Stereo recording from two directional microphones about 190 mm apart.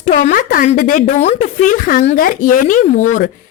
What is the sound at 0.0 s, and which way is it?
A woman's voice, 40° left (ahead or behind).